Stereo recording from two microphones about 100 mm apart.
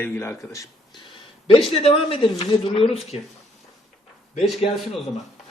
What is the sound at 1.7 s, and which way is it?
Speech, 80° left.